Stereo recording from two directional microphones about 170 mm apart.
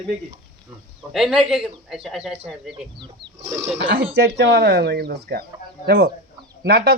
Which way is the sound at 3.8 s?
85° right.